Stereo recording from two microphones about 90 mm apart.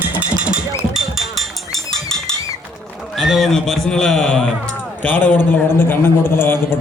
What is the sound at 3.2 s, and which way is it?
A man's voice, 5° right (ahead or behind).